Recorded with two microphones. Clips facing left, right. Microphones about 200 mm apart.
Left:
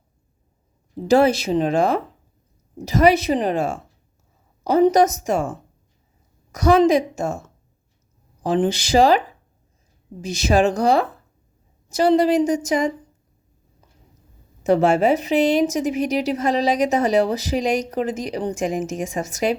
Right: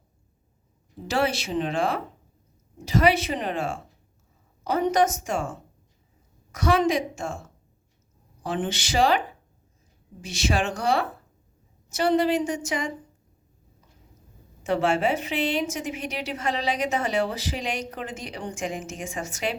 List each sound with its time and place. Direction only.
1.0 s a woman's voice: 40° left (ahead or behind)
6.5 s a woman's voice: 40° left (ahead or behind)
14.6 s a woman's voice: 40° left (ahead or behind)